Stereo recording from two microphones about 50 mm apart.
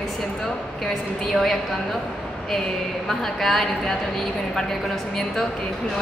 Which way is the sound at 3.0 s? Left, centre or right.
Centre.